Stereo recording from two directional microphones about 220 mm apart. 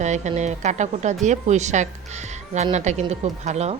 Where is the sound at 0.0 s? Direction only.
30° right (ahead or behind).